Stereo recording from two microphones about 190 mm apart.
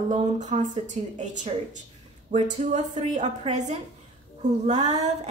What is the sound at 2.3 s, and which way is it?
Speech, 40° right (ahead or behind).